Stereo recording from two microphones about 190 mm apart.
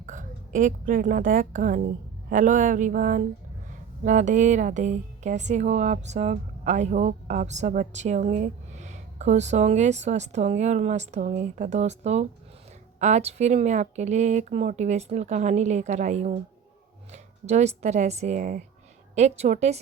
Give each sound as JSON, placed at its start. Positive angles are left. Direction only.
{"t": 0.0, "sound": "a woman's voice", "side_deg": -45}
{"t": 2.3, "sound": "a sound", "side_deg": -45}
{"t": 4.0, "sound": "speech", "side_deg": -40}